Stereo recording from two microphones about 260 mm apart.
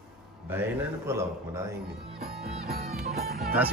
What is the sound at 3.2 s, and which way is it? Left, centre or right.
Speech, right.